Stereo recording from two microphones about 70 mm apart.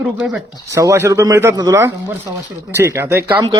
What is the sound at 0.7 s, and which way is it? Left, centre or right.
Speech, right.